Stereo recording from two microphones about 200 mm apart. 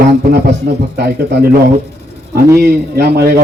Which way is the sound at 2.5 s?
50° right (ahead or behind).